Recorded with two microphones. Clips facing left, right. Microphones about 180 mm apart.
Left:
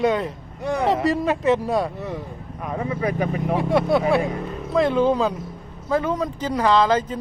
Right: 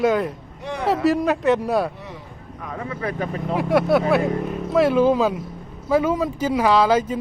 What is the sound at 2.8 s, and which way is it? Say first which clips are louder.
Speech: left 3 dB; 20° left (ahead or behind).